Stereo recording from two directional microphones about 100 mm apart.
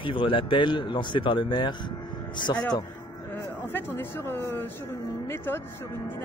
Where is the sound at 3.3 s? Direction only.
20° left (ahead or behind).